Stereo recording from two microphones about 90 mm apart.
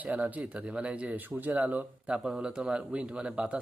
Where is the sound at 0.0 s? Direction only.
15° right (ahead or behind).